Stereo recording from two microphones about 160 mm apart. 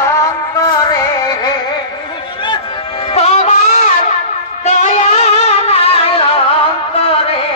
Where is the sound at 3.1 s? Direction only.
40° left (ahead or behind).